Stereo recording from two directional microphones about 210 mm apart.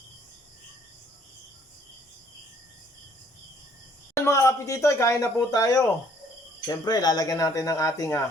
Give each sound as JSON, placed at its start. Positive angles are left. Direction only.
{"t": 4.1, "sound": "speech", "side_deg": 15}